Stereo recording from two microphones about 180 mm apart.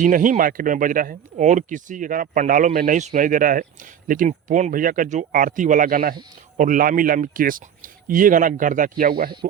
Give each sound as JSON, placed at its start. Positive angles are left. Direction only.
{"t": 0.0, "sound": "speech", "side_deg": -45}